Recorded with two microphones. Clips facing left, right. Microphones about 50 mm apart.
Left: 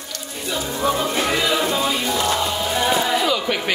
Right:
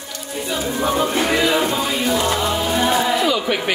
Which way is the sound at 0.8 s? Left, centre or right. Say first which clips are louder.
Right 1 dB; right.